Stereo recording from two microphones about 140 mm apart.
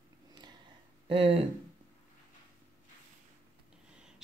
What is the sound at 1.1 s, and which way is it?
Speech, 45° right (ahead or behind).